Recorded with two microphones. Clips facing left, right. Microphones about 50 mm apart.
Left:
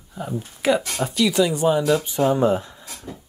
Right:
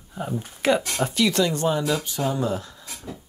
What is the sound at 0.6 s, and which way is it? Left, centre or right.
Speech, centre.